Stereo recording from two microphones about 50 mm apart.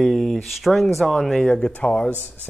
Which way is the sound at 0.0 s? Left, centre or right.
Centre.